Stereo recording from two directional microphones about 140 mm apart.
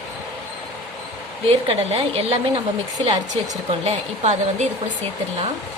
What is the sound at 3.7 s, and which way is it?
Speech, 50° right (ahead or behind).